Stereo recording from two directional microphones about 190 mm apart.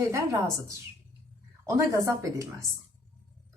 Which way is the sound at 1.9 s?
15° right (ahead or behind).